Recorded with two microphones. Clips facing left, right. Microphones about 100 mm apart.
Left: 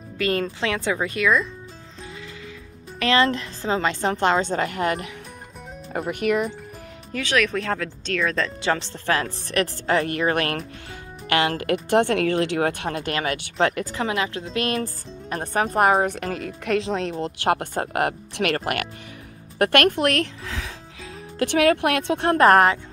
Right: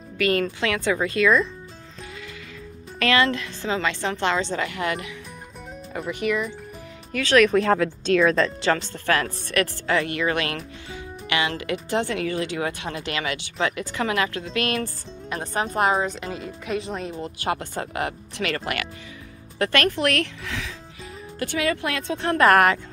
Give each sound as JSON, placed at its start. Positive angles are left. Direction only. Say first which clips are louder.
{"t": 0.2, "sound": "speech", "louder": "right 1 dB", "side_deg": 25}
{"t": 3.0, "sound": "a woman's voice", "louder": "left 1 dB", "side_deg": 30}
{"t": 5.9, "sound": "speech", "louder": "left 3 dB", "side_deg": 55}
{"t": 7.3, "sound": "a woman's voice", "louder": "right 6 dB", "side_deg": -5}
{"t": 8.5, "sound": "speech", "louder": "right 1 dB", "side_deg": 15}
{"t": 8.9, "sound": "a woman's voice", "louder": "even", "side_deg": 25}
{"t": 13.9, "sound": "speech", "louder": "right 1 dB", "side_deg": 25}
{"t": 14.4, "sound": "a woman's voice", "louder": "left 1 dB", "side_deg": 35}
{"t": 15.7, "sound": "speech", "louder": "left 3 dB", "side_deg": 55}
{"t": 17.2, "sound": "speech", "louder": "left 3 dB", "side_deg": 70}
{"t": 19.6, "sound": "speech", "louder": "left 3 dB", "side_deg": 55}
{"t": 21.0, "sound": "speech", "louder": "left 5 dB", "side_deg": 85}
{"t": 22.3, "sound": "a woman's voice", "louder": "left 2 dB", "side_deg": 35}